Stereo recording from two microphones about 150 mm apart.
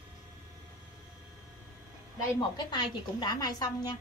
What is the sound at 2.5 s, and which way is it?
A woman's voice, 30° left (ahead or behind).